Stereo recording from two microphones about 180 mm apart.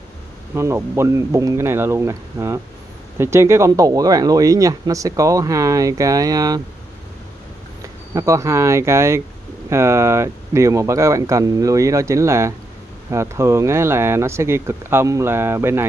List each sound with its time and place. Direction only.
0.6 s speech: 15° right (ahead or behind)
8.1 s speech: 15° right (ahead or behind)